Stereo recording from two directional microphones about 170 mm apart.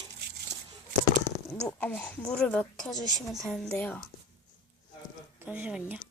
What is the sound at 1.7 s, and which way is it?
A woman's voice, 5° left (ahead or behind).